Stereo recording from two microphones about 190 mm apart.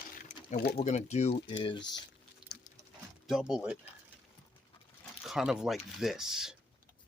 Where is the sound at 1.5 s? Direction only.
25° left (ahead or behind).